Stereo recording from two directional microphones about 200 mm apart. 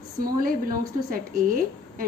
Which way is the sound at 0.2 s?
45° right (ahead or behind).